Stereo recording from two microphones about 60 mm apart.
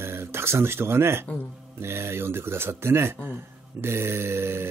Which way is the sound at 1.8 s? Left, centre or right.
Right.